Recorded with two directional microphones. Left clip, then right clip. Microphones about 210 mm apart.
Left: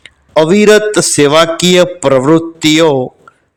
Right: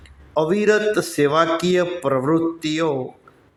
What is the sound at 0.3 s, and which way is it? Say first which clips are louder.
A man's voice: left 11 dB; 35° left (ahead or behind).